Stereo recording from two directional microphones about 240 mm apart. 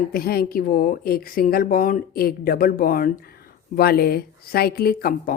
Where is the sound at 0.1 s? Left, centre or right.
Left.